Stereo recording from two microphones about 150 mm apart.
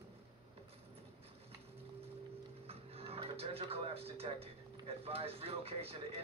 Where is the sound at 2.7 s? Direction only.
40° right (ahead or behind).